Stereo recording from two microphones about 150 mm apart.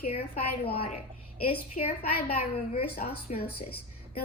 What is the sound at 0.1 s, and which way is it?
Speech, 40° left (ahead or behind).